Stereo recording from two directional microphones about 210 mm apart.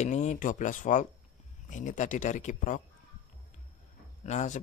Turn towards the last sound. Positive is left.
turn(degrees=35)  # may be behind; listen again after turning